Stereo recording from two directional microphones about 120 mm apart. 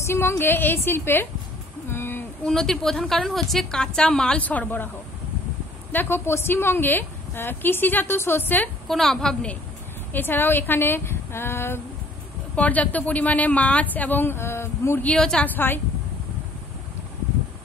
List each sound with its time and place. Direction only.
0.0 s a woman's voice: 20° left (ahead or behind)
1.9 s a sound: 20° left (ahead or behind)
2.4 s a woman's voice: 5° left (ahead or behind)
5.9 s a woman's voice: 15° left (ahead or behind)
8.8 s a woman's voice: 5° left (ahead or behind); by 15.0 s 20° left (ahead or behind)
15.0 s speech: 5° left (ahead or behind)